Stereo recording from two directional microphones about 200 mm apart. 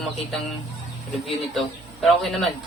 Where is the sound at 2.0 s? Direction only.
Centre (ahead or behind).